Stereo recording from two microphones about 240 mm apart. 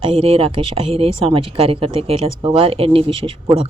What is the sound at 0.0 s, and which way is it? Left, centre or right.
A woman's voice, right.